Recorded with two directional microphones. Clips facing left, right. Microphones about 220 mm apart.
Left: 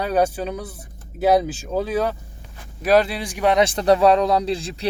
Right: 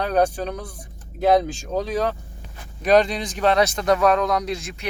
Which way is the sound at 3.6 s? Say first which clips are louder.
Left 3 dB; 30° left (ahead or behind).